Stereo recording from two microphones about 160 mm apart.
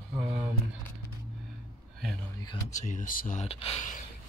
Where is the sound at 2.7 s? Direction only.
50° left (ahead or behind).